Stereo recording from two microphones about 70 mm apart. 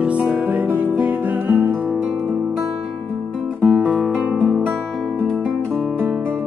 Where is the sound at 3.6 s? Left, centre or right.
Centre.